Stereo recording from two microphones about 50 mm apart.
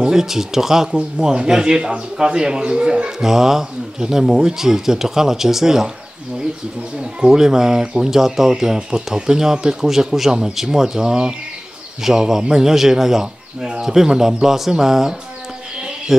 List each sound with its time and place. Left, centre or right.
0.0 s a man's voice: centre
7.0 s a man's voice: centre
8.1 s a man's voice: centre